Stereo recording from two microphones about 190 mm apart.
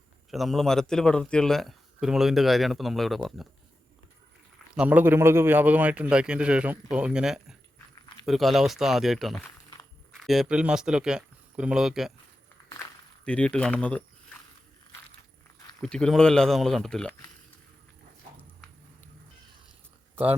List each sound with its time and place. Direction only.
0.3 s speech: centre (ahead or behind)
4.8 s a man's voice: 10° right (ahead or behind)
13.2 s speech: 5° left (ahead or behind)
15.8 s speech: 5° left (ahead or behind)